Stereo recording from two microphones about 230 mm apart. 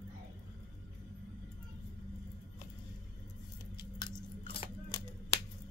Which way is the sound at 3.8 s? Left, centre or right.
Centre.